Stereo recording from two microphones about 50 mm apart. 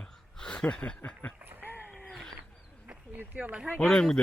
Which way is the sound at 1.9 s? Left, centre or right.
Centre.